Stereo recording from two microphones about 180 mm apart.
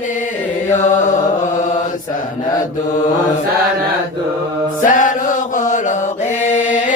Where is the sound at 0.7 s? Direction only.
40° left (ahead or behind).